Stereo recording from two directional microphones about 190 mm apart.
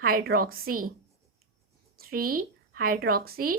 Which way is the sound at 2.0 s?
50° right (ahead or behind).